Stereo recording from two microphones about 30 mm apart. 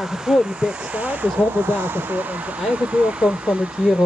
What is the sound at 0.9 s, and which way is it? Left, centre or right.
Speech, right.